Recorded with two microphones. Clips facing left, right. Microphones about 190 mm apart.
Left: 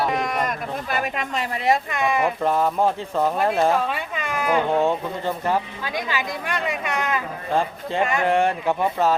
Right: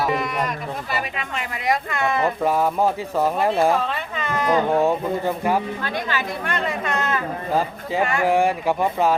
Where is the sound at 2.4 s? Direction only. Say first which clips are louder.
Right 1 dB; 10° right (ahead or behind).